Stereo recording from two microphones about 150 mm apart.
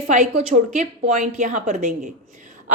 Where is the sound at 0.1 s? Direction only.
55° right (ahead or behind).